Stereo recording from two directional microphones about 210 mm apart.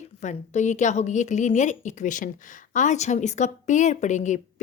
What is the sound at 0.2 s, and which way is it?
A woman's voice, 35° left (ahead or behind).